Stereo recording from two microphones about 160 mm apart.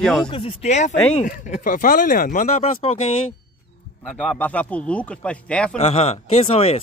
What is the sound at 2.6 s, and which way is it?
Speech, 40° left (ahead or behind).